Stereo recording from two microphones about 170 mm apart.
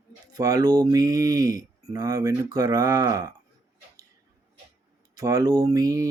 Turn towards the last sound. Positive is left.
turn(degrees=-20)  # may be behind; listen again after turning